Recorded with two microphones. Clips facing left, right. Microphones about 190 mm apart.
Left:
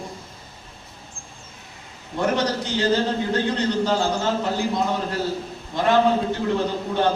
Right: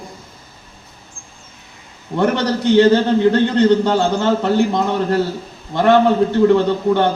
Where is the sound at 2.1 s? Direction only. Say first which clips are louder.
Right 5 dB; 65° right (ahead or behind).